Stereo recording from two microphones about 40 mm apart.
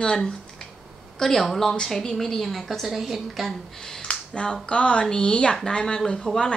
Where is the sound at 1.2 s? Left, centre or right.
Centre.